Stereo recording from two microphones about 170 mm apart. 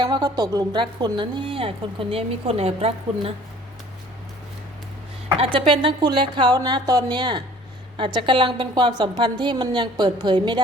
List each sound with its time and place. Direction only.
0.0 s a woman's voice: 25° right (ahead or behind)
5.4 s a woman's voice: 30° right (ahead or behind)